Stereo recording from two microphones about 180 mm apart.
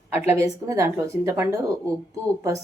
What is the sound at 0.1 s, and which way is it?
Speech, 15° right (ahead or behind).